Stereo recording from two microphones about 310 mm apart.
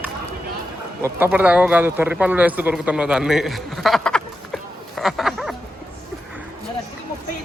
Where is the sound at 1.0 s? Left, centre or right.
Centre.